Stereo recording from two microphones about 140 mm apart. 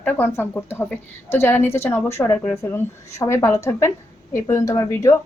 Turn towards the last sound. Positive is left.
turn(degrees=20)  # may be behind; listen again after turning